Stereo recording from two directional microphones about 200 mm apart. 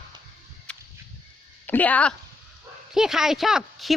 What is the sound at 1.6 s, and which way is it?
A woman's voice, 10° left (ahead or behind).